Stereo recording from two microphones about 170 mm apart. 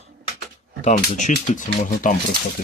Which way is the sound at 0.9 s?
45° left (ahead or behind).